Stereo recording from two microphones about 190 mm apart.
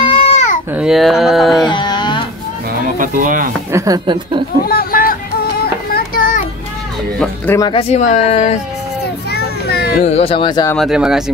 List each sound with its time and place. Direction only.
0.0 s baby cry: 30° left (ahead or behind)
0.7 s speech: centre (ahead or behind)
1.6 s music: 25° left (ahead or behind)
3.0 s speech: 45° right (ahead or behind)
3.7 s a woman's voice: 20° right (ahead or behind)
4.6 s music: 50° left (ahead or behind)
5.9 s children playing: 45° left (ahead or behind)
7.2 s speech: 10° left (ahead or behind)
7.6 s speech: 30° left (ahead or behind)
9.3 s children playing: 60° left (ahead or behind)
10.0 s speech: 30° left (ahead or behind)
10.8 s speech: 5° right (ahead or behind)